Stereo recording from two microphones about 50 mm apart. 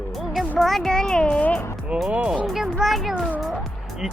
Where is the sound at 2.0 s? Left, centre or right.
Right.